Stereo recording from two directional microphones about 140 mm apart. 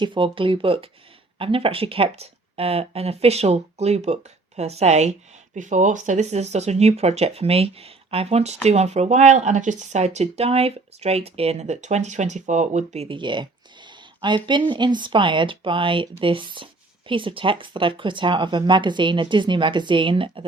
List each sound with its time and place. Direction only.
0.0 s speech: 35° right (ahead or behind); by 13.1 s 55° right (ahead or behind)
13.1 s speech: 35° right (ahead or behind)